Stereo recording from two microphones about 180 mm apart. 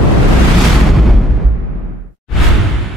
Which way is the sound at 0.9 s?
Centre (ahead or behind).